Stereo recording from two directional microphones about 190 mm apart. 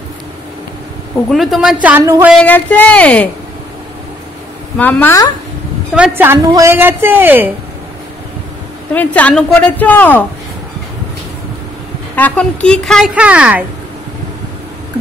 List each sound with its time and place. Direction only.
1.3 s a woman's voice: centre (ahead or behind)
2.3 s speech: 10° left (ahead or behind)
4.7 s speech: 10° left (ahead or behind)
5.9 s a woman's voice: 10° right (ahead or behind)
8.9 s speech: 10° left (ahead or behind)
12.2 s a woman's voice: 5° left (ahead or behind)